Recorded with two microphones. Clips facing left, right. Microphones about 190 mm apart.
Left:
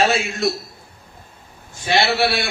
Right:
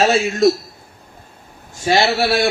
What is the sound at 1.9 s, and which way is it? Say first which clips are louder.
Speech: right 3 dB; 40° right (ahead or behind).